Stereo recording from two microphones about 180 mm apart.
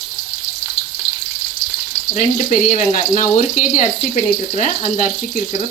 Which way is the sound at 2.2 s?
45° left (ahead or behind).